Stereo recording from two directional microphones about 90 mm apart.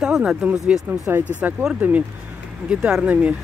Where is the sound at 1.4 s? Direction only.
10° right (ahead or behind).